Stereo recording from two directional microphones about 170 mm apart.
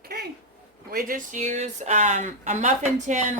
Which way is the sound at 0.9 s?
55° right (ahead or behind).